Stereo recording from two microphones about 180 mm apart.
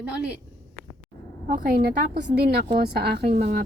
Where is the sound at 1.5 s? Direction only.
50° right (ahead or behind).